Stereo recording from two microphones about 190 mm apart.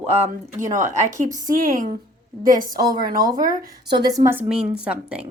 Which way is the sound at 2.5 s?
45° right (ahead or behind).